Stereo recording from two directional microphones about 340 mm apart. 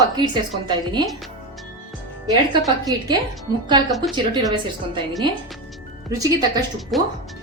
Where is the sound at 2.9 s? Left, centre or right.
Centre.